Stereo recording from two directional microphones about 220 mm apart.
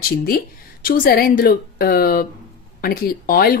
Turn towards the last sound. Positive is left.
turn(degrees=40)  # may be behind; listen again after turning